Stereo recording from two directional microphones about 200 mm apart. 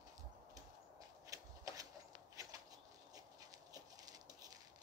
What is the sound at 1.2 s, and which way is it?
Shuffling cards, 15° right (ahead or behind).